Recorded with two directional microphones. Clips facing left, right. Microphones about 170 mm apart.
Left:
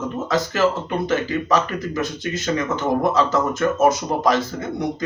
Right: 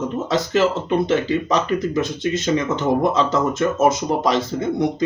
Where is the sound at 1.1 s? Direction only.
20° right (ahead or behind).